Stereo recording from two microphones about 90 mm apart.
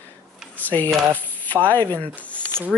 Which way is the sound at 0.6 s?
20° left (ahead or behind).